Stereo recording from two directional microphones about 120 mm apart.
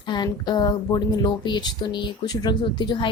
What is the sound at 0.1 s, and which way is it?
Speech, 35° left (ahead or behind).